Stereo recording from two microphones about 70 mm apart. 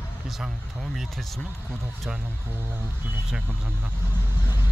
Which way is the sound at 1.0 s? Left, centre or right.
Centre.